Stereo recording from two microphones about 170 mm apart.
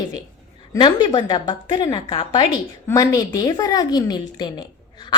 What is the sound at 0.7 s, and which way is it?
A woman's voice, 25° left (ahead or behind).